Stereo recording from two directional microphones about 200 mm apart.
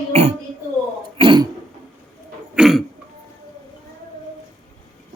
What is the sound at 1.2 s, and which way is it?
Throat clearing, 20° right (ahead or behind).